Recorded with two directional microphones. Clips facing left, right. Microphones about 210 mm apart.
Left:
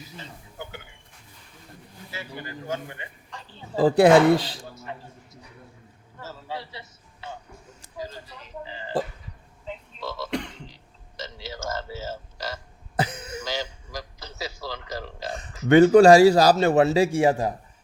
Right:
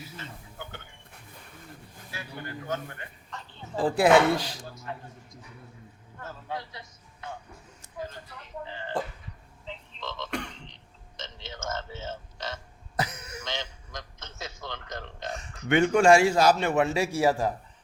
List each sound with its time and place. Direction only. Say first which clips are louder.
2.6 s speech: left 2 dB; 15° left (ahead or behind)
3.8 s a man's voice: left 5 dB; 35° left (ahead or behind)
4.7 s a man's voice: left 1 dB; 5° left (ahead or behind)
7.9 s a woman's voice: left 2 dB; 10° left (ahead or behind)
9.6 s frog: left 5 dB; 10° left (ahead or behind)
11.2 s speech: left 5 dB; 5° left (ahead or behind)
13.0 s cough: left 4 dB; 30° left (ahead or behind)
13.4 s a sound: left 4 dB; 5° left (ahead or behind)
15.3 s a man's voice: left 8 dB; 35° left (ahead or behind)